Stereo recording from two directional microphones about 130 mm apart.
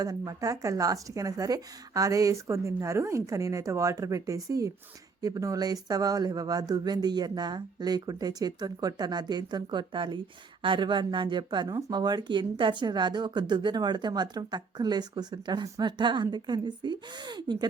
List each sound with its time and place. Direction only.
0.0 s speech: 30° right (ahead or behind)